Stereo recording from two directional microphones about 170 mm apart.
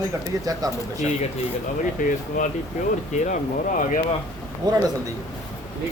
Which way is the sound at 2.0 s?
50° left (ahead or behind).